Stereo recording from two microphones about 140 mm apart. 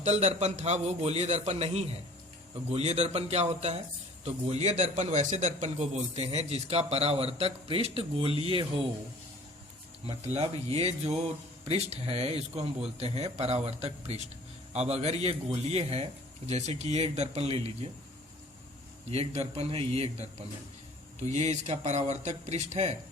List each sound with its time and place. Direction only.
0.0 s a man's voice: 55° right (ahead or behind)
10.3 s a man's voice: 45° right (ahead or behind)
19.1 s a man's voice: 45° right (ahead or behind)